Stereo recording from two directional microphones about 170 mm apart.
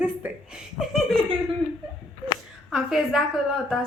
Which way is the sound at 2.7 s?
Centre (ahead or behind).